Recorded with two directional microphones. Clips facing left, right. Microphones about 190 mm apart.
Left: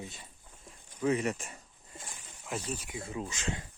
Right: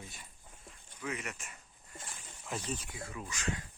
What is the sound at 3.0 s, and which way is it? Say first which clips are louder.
Speech: left 5 dB; 25° left (ahead or behind).